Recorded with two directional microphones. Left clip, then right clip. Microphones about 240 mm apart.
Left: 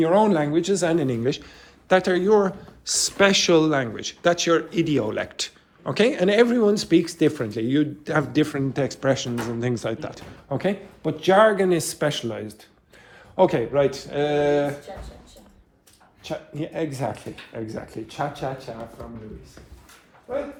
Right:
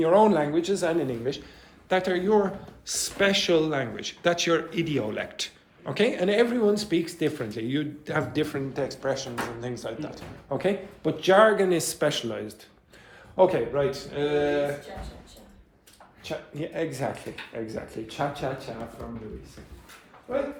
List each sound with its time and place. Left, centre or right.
0.0 s a man's voice: left
14.1 s speech: centre
16.2 s a man's voice: left